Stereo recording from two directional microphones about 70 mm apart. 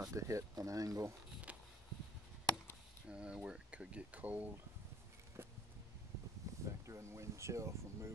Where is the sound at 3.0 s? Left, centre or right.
Centre.